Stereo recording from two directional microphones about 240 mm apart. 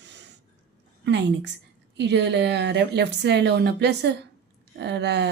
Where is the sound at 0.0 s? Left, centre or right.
Right.